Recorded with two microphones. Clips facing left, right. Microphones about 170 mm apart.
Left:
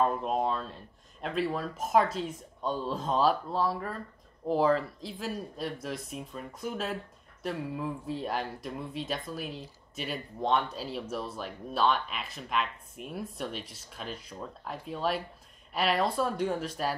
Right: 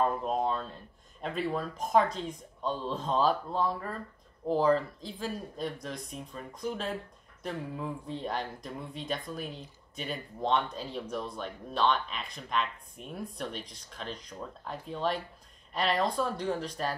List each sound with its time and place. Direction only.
0.0 s speech: centre (ahead or behind)